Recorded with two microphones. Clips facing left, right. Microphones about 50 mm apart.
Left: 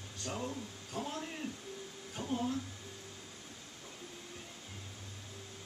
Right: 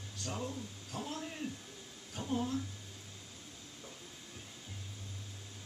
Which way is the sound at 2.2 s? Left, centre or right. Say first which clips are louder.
Even; left.